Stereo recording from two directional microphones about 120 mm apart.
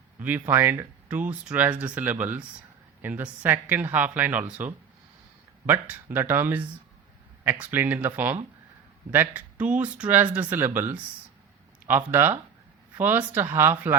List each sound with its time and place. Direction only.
0.2 s speech: 15° right (ahead or behind)